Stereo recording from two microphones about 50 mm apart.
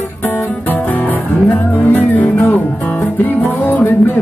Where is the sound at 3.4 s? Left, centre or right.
Left.